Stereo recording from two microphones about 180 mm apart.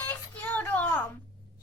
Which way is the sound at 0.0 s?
10° left (ahead or behind).